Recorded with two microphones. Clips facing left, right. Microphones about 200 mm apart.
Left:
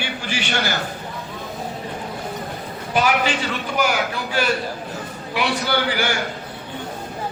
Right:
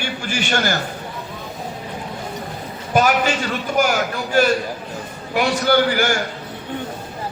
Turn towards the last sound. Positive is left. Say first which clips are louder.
# right 5 dB
turn(degrees=-45)  # may be behind; listen again after turning